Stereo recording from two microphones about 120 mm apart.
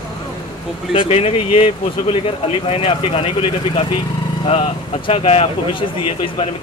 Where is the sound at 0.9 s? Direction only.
60° left (ahead or behind).